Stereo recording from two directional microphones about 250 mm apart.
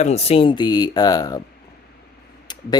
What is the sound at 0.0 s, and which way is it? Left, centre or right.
Speech, left.